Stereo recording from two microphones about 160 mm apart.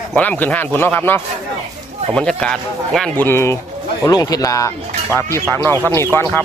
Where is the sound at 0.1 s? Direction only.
10° left (ahead or behind).